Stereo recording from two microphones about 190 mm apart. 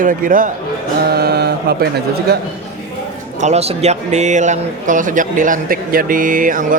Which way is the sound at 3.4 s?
35° right (ahead or behind).